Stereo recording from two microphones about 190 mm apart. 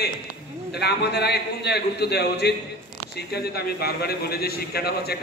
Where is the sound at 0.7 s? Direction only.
60° left (ahead or behind).